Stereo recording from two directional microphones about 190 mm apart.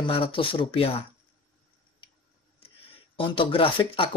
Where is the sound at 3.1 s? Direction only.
25° left (ahead or behind).